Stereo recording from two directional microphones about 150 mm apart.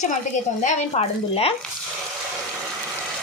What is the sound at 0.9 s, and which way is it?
Speech, 40° left (ahead or behind).